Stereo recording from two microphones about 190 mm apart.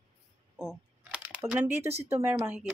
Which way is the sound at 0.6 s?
5° right (ahead or behind).